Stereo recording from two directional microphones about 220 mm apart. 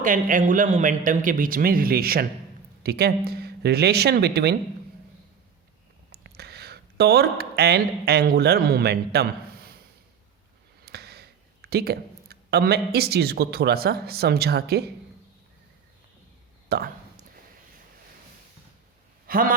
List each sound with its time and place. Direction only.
0.0 s speech: 35° right (ahead or behind)
6.1 s speech: 45° right (ahead or behind)
10.8 s speech: 45° right (ahead or behind)
16.6 s speech: 45° right (ahead or behind)
19.3 s a man's voice: 40° right (ahead or behind)